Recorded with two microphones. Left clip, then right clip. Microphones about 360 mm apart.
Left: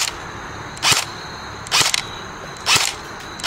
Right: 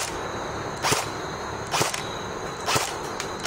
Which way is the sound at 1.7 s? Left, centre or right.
Centre.